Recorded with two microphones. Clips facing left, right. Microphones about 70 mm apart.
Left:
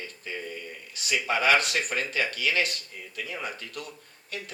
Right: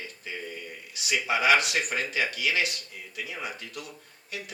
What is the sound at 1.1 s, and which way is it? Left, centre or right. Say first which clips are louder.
A man's voice: even; left.